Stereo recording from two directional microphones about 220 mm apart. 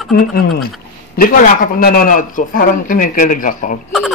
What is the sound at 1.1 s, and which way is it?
Speech, 40° left (ahead or behind).